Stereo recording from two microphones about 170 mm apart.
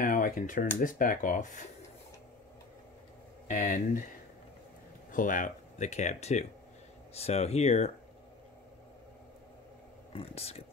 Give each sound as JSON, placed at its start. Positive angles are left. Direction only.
{"t": 0.0, "sound": "speech", "side_deg": 50}
{"t": 3.4, "sound": "speech", "side_deg": 45}
{"t": 5.1, "sound": "speech", "side_deg": 50}
{"t": 10.1, "sound": "speech", "side_deg": 35}